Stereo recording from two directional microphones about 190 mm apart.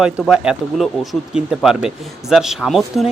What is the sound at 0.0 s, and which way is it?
Speech, 5° right (ahead or behind).